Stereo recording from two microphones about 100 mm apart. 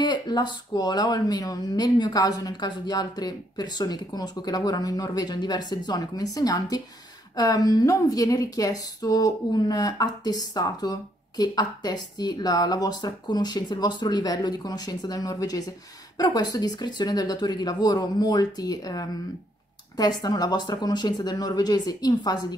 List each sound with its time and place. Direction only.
0.0 s a woman's voice: 45° left (ahead or behind)